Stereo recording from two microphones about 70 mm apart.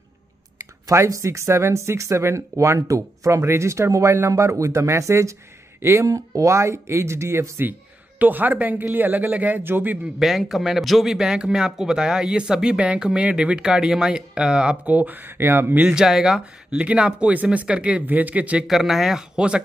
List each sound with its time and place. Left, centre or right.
0.8 s speech: right
8.2 s speech: right
10.1 s speech: centre; by 15.8 s right
15.8 s speech: centre
18.6 s speech: centre